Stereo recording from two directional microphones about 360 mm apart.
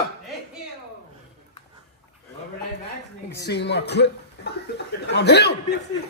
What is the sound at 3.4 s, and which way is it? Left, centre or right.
Speech, left.